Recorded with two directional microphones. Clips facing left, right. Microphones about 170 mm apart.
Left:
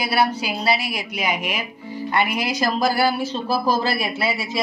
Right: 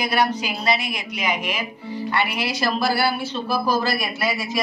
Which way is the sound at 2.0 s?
45° left (ahead or behind).